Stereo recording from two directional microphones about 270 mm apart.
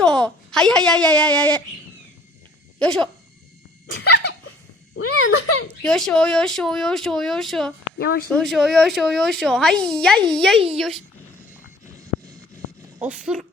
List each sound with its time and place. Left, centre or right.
0.0 s a woman's voice: centre
2.7 s speech: centre
3.9 s dog: left
4.9 s speech: left
5.8 s a child's voice: centre
7.9 s dog: left
8.3 s a child's voice: centre
13.0 s a child's voice: centre